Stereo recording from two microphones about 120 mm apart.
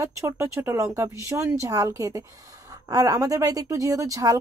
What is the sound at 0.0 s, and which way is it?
Speech, 25° right (ahead or behind).